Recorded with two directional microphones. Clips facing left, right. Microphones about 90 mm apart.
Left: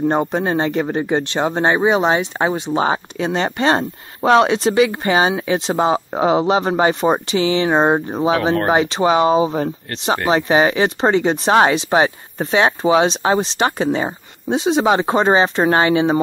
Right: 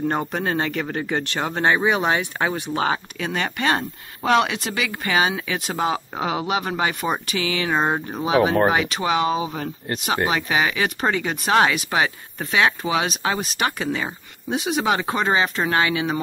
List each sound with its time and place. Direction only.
0.1 s speech: 20° left (ahead or behind)